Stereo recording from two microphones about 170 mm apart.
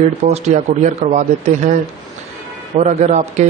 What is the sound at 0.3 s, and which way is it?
A man's voice, 45° right (ahead or behind).